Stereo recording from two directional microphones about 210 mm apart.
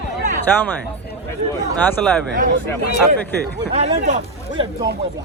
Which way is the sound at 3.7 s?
30° right (ahead or behind).